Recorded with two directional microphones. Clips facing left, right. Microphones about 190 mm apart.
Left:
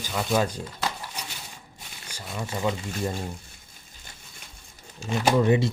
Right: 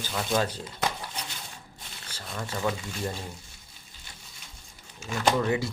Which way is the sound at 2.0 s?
10° left (ahead or behind).